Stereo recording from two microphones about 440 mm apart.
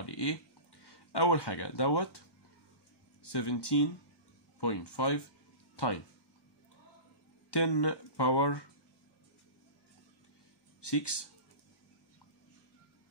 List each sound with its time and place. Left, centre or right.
0.0 s a sound: left
0.8 s speech: left
3.3 s speech: left
7.5 s speech: left
10.8 s speech: left